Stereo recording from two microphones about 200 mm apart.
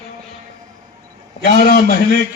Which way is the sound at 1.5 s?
45° left (ahead or behind).